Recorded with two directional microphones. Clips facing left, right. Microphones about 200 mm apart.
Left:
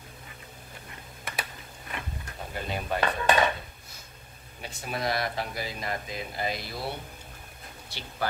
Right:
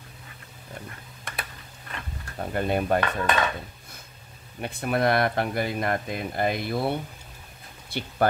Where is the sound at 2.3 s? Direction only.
55° right (ahead or behind).